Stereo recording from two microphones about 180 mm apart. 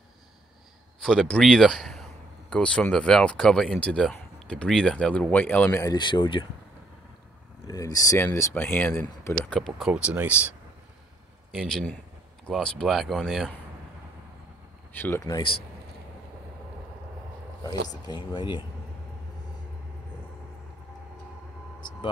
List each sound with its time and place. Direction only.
1.0 s speech: 5° left (ahead or behind); by 6.4 s 25° left (ahead or behind)
7.6 s speech: 20° left (ahead or behind); by 10.3 s 5° right (ahead or behind)
11.5 s speech: centre (ahead or behind)
14.9 s speech: 10° left (ahead or behind)
18.0 s speech: 25° left (ahead or behind)